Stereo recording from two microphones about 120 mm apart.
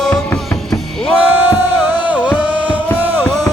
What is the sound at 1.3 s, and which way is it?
Music, 15° right (ahead or behind).